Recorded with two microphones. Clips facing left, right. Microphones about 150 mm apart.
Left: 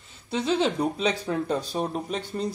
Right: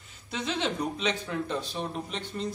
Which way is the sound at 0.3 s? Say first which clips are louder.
Left 7 dB; 35° left (ahead or behind).